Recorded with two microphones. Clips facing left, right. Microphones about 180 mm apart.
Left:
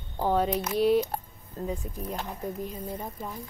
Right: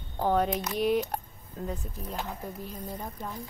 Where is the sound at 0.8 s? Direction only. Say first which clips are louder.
Left 4 dB; 10° right (ahead or behind).